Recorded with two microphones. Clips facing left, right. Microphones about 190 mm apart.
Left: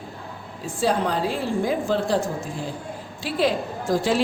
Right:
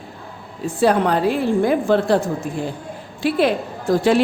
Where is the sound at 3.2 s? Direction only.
60° right (ahead or behind).